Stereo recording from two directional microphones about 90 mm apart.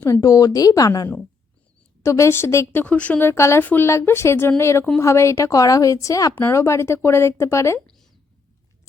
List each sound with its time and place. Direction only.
0.0 s a woman's voice: 40° left (ahead or behind)
2.0 s a woman's voice: 35° left (ahead or behind)
2.8 s speech: 15° left (ahead or behind); by 3.6 s 30° left (ahead or behind)
3.6 s speech: 20° left (ahead or behind)
3.8 s a woman's voice: 30° left (ahead or behind)